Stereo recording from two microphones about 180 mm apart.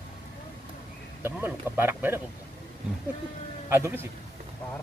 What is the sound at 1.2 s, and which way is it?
Speech, 10° right (ahead or behind).